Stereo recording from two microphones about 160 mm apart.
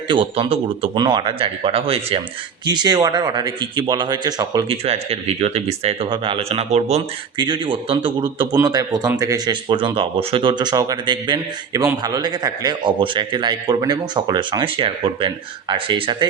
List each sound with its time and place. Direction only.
0.1 s speech: 35° right (ahead or behind)
4.7 s speech: 40° right (ahead or behind)
7.3 s speech: 30° right (ahead or behind)